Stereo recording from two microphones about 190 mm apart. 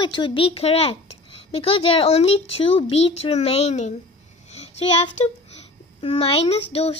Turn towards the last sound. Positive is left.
turn(degrees=30)  # may be behind; listen again after turning